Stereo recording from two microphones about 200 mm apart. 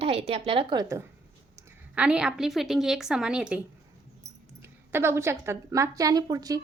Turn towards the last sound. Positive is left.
turn(degrees=-20)  # may be behind; listen again after turning